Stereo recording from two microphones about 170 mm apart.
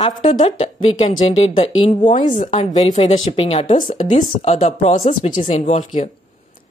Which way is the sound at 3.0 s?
30° left (ahead or behind).